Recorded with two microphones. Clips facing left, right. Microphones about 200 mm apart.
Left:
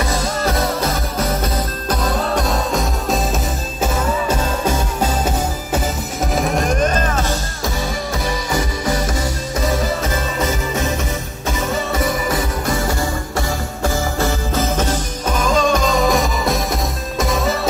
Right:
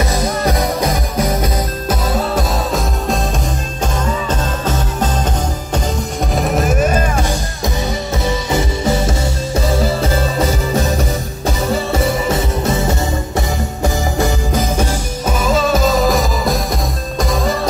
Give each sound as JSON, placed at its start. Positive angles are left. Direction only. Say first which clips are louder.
{"t": 0.1, "sound": "music", "louder": "right 3 dB", "side_deg": -20}
{"t": 3.8, "sound": "music", "louder": "left 1 dB", "side_deg": 10}
{"t": 6.3, "sound": "music", "louder": "right 2 dB", "side_deg": 0}
{"t": 8.5, "sound": "music", "louder": "right 4 dB", "side_deg": -25}